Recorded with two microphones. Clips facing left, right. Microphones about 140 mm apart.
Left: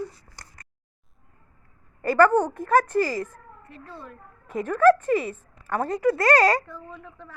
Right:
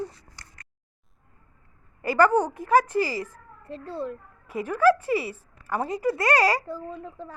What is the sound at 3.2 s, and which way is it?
Speech, 55° left (ahead or behind).